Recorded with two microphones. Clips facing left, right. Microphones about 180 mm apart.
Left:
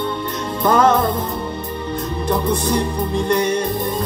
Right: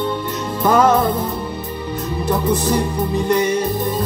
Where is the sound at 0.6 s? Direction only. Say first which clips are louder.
Right 1 dB; 10° right (ahead or behind).